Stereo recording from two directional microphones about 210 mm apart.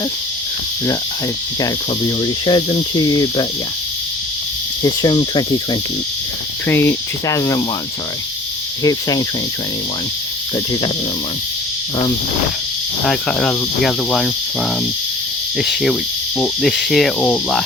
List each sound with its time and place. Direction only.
2.2 s cricket: 20° left (ahead or behind)
4.8 s cricket: 20° left (ahead or behind)
6.7 s speech: 10° left (ahead or behind)
8.8 s speech: 20° left (ahead or behind)
13.1 s speech: 5° left (ahead or behind)
15.5 s speech: centre (ahead or behind)